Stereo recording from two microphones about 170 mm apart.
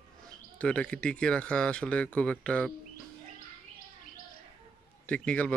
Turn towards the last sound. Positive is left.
turn(degrees=10)  # may be behind; listen again after turning